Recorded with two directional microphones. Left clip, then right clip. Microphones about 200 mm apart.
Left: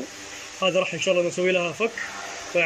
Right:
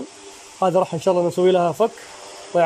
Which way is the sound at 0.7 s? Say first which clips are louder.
Right 4 dB; 20° right (ahead or behind).